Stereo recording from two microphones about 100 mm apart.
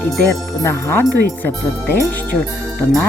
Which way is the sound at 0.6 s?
25° left (ahead or behind).